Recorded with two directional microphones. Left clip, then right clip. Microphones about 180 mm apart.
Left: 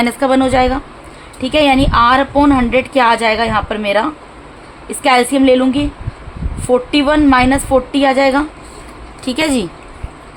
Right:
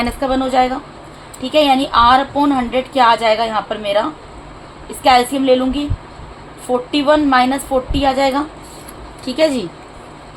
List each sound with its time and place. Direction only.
0.0 s a woman's voice: 45° left (ahead or behind)